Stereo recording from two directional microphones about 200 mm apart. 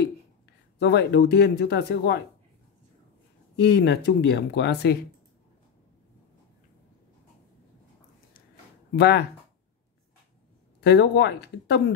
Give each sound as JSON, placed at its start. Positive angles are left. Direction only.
{"t": 0.7, "sound": "speech", "side_deg": 60}
{"t": 3.5, "sound": "speech", "side_deg": 55}
{"t": 8.9, "sound": "speech", "side_deg": 55}
{"t": 10.8, "sound": "speech", "side_deg": 60}